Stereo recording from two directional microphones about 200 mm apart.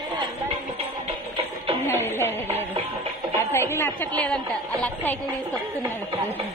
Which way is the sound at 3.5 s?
15° left (ahead or behind).